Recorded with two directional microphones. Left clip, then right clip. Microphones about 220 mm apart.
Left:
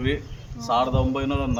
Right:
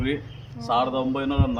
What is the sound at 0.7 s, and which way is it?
Speech, 10° left (ahead or behind).